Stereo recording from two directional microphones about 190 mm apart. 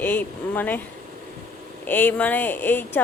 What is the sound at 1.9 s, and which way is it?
A woman's voice, 10° left (ahead or behind).